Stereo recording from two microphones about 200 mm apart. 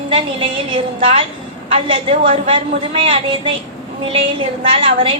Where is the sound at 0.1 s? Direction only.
25° right (ahead or behind).